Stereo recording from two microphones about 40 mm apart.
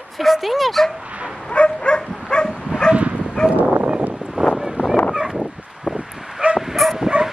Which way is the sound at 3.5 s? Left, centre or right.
Right.